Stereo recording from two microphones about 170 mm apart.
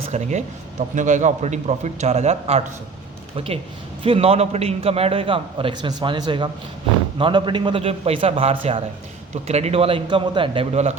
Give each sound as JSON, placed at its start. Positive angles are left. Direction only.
{"t": 0.1, "sound": "a man's voice", "side_deg": -45}